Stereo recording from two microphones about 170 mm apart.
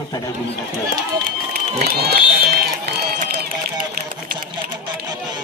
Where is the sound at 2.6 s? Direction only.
60° right (ahead or behind).